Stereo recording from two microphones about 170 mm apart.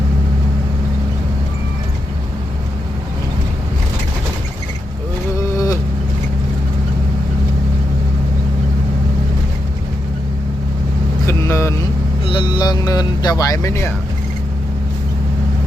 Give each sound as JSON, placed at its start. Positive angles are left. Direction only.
{"t": 5.5, "sound": "vehicle", "side_deg": 20}
{"t": 11.3, "sound": "vehicle", "side_deg": 15}
{"t": 12.3, "sound": "vehicle", "side_deg": 30}